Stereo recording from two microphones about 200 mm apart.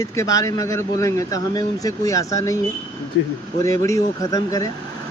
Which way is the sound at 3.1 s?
65° left (ahead or behind).